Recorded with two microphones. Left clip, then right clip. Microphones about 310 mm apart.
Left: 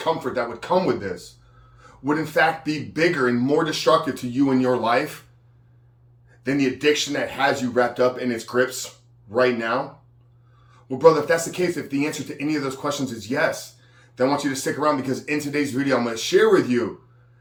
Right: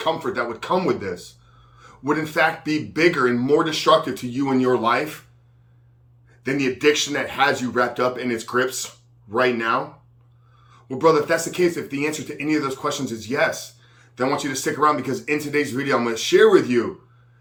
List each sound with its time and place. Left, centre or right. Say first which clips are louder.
0.0 s speech: right 1 dB; centre
6.4 s speech: right 1 dB; centre